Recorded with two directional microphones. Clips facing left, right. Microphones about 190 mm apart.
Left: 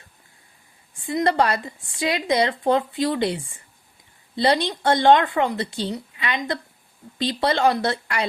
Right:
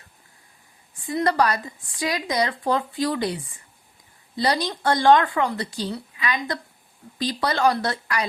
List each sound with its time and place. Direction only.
1.0 s speech: 25° left (ahead or behind)